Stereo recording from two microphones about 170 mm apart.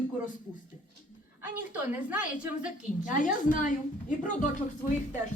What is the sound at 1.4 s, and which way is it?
A woman's voice, 10° right (ahead or behind).